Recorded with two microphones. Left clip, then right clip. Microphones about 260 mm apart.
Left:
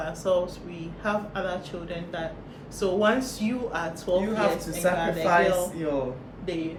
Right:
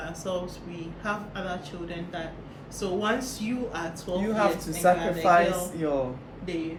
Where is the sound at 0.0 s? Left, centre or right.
Centre.